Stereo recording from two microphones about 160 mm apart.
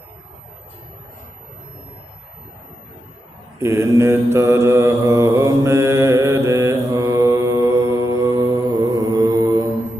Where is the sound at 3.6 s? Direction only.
15° right (ahead or behind).